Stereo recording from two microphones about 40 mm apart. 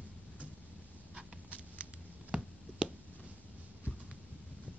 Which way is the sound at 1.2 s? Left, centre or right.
Right.